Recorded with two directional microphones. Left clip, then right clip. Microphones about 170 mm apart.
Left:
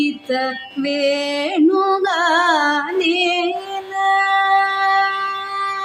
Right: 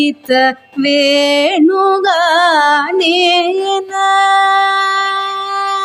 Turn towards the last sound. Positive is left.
turn(degrees=-35)  # may be behind; listen again after turning